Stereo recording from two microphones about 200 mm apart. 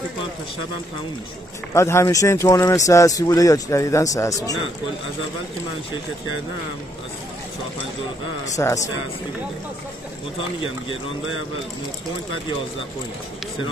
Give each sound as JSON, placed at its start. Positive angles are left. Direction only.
{"t": 1.7, "sound": "speech", "side_deg": 15}
{"t": 8.5, "sound": "speech", "side_deg": 15}